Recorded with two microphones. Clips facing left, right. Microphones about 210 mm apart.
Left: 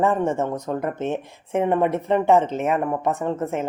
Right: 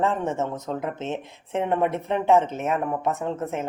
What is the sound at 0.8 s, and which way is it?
Speech, 55° left (ahead or behind).